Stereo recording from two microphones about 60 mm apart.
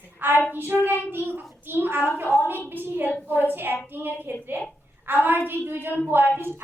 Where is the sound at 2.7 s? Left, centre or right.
Right.